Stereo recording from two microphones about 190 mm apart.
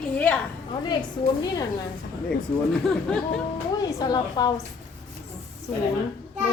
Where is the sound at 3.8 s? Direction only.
20° left (ahead or behind).